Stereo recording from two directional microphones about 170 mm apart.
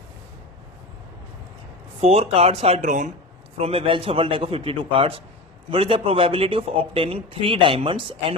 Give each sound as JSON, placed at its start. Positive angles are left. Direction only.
{"t": 2.0, "sound": "speech", "side_deg": -40}